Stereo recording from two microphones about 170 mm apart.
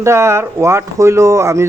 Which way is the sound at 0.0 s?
15° right (ahead or behind).